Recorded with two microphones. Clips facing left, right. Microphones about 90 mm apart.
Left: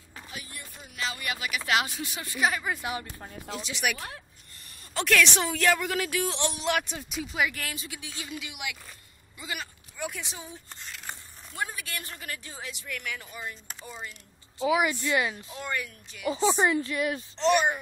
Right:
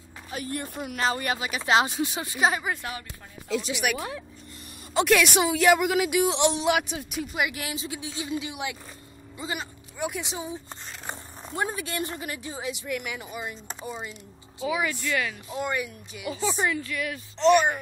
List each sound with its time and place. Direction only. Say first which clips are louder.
0.3 s a woman's voice: right 13 dB; 50° right (ahead or behind)
1.4 s speech: right 4 dB; 25° right (ahead or behind)
2.8 s speech: left 2 dB; 20° left (ahead or behind)
3.8 s speech: even; centre (ahead or behind)
4.9 s a woman's voice: right 4 dB; 15° right (ahead or behind)
7.6 s speech: right 5 dB; 25° right (ahead or behind)
10.7 s speech: right 4 dB; 30° right (ahead or behind)
14.6 s speech: left 3 dB; 20° left (ahead or behind)
15.5 s a woman's voice: right 5 dB; 15° right (ahead or behind)
16.3 s speech: left 3 dB; 25° left (ahead or behind)
17.4 s speech: right 4 dB; centre (ahead or behind)